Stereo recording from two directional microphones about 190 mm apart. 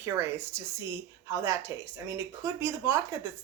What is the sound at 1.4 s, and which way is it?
Speech, 15° right (ahead or behind).